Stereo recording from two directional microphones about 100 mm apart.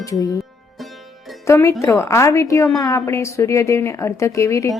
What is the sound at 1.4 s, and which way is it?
Speech, 25° left (ahead or behind).